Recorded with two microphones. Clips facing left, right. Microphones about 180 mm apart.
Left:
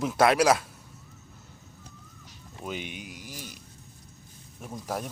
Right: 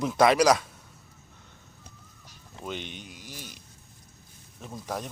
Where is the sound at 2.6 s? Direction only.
10° left (ahead or behind).